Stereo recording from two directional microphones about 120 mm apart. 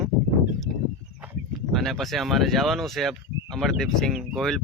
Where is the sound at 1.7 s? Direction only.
Centre (ahead or behind).